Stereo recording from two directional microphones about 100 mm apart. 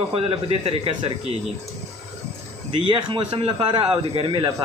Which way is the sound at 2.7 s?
50° right (ahead or behind).